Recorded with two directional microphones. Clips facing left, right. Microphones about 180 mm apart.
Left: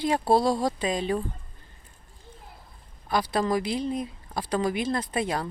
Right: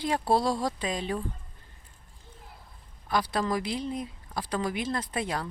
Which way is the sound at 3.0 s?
25° left (ahead or behind).